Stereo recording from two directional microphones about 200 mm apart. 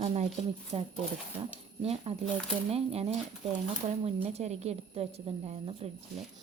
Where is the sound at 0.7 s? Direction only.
30° right (ahead or behind).